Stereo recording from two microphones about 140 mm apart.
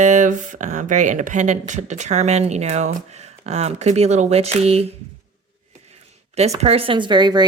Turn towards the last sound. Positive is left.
turn(degrees=-30)  # may be behind; listen again after turning